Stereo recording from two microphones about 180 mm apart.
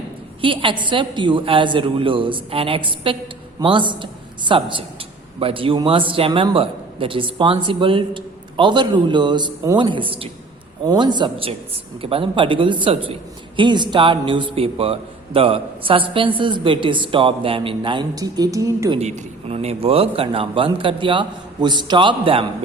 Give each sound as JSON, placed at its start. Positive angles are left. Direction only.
{"t": 0.4, "sound": "a man's voice", "side_deg": -30}
{"t": 18.9, "sound": "a man's voice", "side_deg": -35}